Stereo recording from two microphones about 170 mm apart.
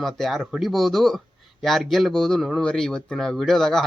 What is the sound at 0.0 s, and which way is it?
A man's voice, centre (ahead or behind).